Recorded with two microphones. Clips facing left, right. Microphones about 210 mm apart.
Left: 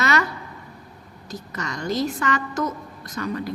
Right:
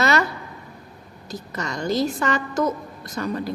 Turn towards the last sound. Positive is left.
turn(degrees=-35)  # may be behind; listen again after turning